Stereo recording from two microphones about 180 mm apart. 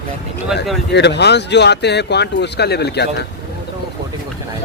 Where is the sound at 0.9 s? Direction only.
70° left (ahead or behind).